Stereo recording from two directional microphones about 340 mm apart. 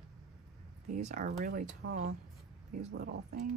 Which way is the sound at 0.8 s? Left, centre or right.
Right.